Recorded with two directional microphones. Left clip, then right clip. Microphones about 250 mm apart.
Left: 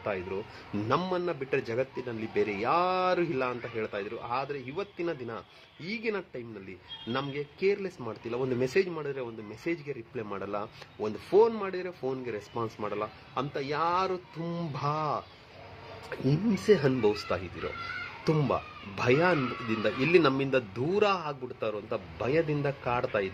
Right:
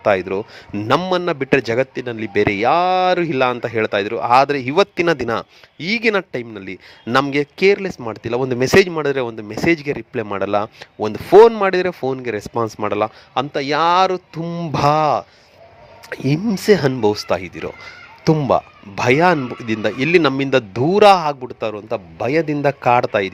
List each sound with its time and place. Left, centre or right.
0.0 s speech: right